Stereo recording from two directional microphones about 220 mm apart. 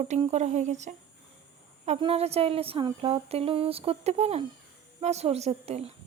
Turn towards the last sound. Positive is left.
turn(degrees=-30)  # may be behind; listen again after turning